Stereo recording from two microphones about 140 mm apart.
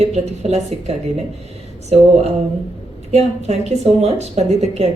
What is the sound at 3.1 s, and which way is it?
A woman's voice, 50° right (ahead or behind).